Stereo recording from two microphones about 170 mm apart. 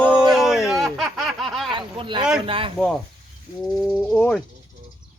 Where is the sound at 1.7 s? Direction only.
30° right (ahead or behind).